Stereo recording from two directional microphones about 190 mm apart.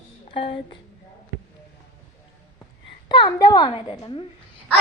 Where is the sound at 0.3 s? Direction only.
25° left (ahead or behind).